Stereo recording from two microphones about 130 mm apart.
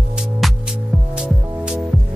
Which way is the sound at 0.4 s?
Centre (ahead or behind).